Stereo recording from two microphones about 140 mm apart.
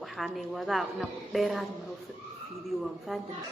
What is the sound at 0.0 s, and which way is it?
A woman's voice, centre (ahead or behind).